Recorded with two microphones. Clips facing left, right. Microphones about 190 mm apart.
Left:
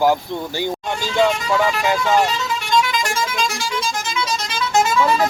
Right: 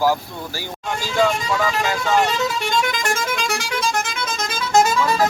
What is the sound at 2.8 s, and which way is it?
Music, 50° right (ahead or behind).